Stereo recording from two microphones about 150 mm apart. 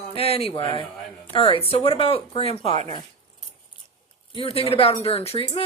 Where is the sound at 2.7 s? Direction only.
50° right (ahead or behind).